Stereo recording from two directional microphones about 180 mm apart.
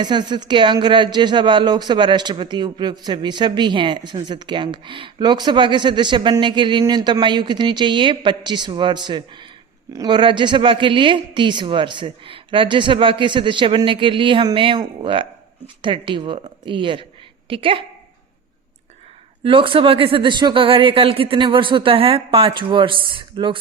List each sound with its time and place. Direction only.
0.0 s speech: 25° right (ahead or behind)
19.4 s speech: 30° right (ahead or behind)